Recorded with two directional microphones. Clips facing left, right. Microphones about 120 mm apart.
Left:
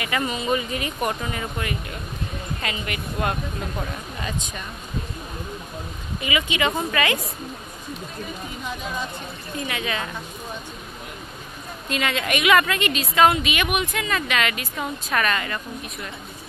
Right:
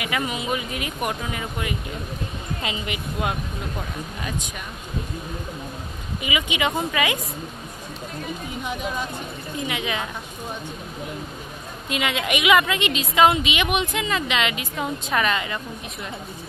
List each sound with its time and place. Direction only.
0.0 s speech: 5° right (ahead or behind)
2.6 s a woman's voice: 20° right (ahead or behind)
4.2 s speech: 5° right (ahead or behind)
6.2 s speech: 15° right (ahead or behind)
9.6 s a woman's voice: 20° right (ahead or behind)
11.9 s a woman's voice: 15° right (ahead or behind)